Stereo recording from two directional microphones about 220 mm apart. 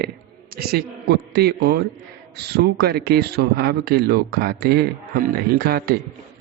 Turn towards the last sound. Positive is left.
turn(degrees=-45)  # may be behind; listen again after turning